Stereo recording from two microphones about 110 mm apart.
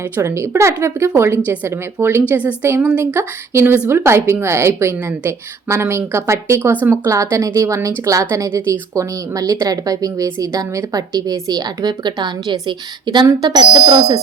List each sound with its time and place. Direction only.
0.2 s a woman's voice: 25° right (ahead or behind); by 14.2 s 50° right (ahead or behind)